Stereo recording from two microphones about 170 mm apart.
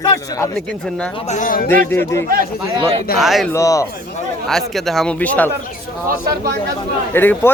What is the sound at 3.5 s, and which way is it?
Speech, 20° left (ahead or behind).